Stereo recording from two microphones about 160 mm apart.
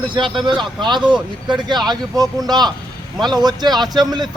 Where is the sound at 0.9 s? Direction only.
30° right (ahead or behind).